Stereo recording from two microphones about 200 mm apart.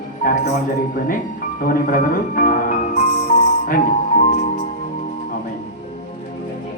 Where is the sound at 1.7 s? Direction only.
45° left (ahead or behind).